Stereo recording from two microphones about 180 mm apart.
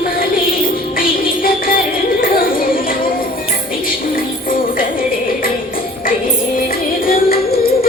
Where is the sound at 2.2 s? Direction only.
50° left (ahead or behind).